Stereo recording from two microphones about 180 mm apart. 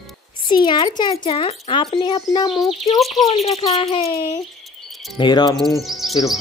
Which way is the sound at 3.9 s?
35° left (ahead or behind).